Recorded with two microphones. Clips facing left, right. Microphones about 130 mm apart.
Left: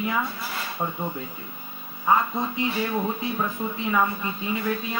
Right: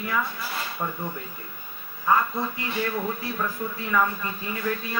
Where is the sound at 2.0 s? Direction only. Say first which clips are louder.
Left 1 dB; 20° left (ahead or behind).